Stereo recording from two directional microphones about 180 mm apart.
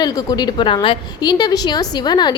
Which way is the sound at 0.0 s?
20° left (ahead or behind).